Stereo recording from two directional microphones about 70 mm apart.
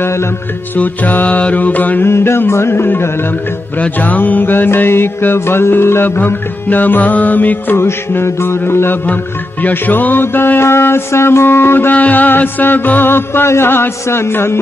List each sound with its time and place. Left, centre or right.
0.7 s music: left
3.8 s music: left
9.0 s music: left